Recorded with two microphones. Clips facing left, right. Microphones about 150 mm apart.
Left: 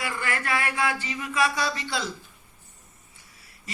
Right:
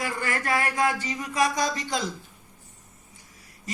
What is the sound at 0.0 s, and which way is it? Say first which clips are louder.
A woman's voice: right 1 dB; 40° right (ahead or behind).